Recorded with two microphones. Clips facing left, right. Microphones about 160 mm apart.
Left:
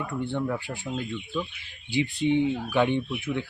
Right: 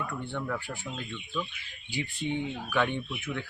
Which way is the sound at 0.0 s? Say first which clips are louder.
Left 6 dB; 20° left (ahead or behind).